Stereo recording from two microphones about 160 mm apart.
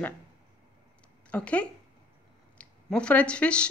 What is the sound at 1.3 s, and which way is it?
Speech, 10° left (ahead or behind).